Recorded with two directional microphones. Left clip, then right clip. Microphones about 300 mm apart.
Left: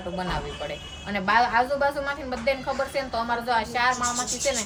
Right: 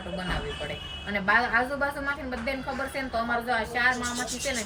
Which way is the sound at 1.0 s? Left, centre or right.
Centre.